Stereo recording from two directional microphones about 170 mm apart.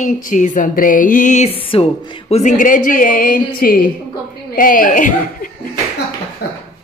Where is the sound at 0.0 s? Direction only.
45° left (ahead or behind).